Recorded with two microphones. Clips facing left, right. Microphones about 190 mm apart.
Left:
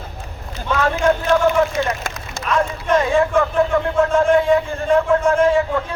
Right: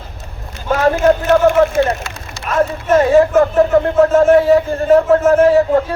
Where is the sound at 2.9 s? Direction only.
40° right (ahead or behind).